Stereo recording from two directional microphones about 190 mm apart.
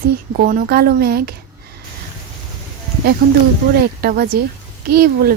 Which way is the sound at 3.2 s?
55° right (ahead or behind).